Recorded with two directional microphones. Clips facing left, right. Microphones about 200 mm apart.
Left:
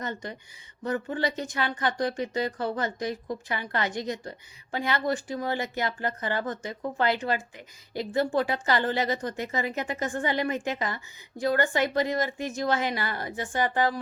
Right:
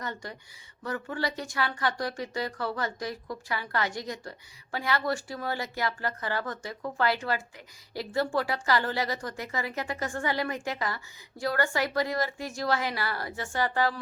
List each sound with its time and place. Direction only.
0.0 s speech: 20° left (ahead or behind)